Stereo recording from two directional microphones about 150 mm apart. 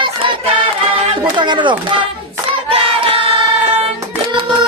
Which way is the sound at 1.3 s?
30° right (ahead or behind).